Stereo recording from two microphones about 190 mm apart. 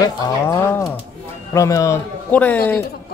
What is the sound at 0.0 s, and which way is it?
A man's voice, 15° left (ahead or behind).